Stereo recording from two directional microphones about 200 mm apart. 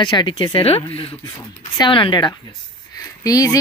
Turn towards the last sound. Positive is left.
turn(degrees=15)  # may be behind; listen again after turning